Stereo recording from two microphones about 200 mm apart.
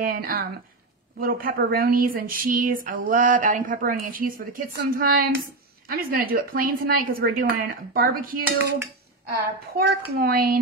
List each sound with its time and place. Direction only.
0.0 s a woman's voice: 45° right (ahead or behind)
9.8 s a woman's voice: 50° right (ahead or behind)